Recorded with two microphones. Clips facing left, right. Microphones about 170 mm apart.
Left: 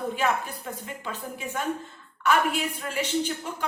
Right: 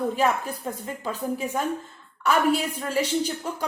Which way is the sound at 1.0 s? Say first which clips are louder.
Right 8 dB; 35° right (ahead or behind).